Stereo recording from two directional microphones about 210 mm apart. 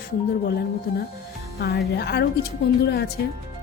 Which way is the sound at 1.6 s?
50° left (ahead or behind).